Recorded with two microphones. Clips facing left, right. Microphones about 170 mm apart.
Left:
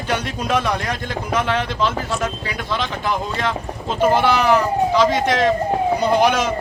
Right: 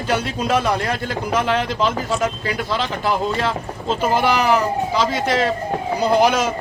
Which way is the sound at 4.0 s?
10° right (ahead or behind).